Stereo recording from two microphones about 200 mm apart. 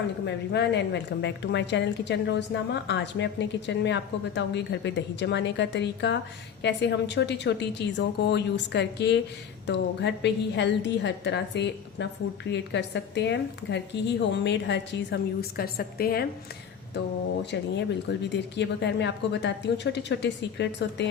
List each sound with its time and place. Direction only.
0.3 s a woman's voice: 60° left (ahead or behind)
17.5 s a woman's voice: 60° left (ahead or behind)